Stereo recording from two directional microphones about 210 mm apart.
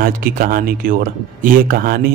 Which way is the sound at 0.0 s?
40° right (ahead or behind).